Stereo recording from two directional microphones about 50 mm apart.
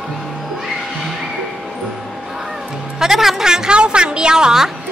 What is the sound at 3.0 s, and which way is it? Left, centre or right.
A woman's voice, centre.